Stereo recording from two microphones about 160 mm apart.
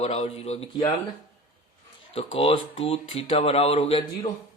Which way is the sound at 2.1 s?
35° left (ahead or behind).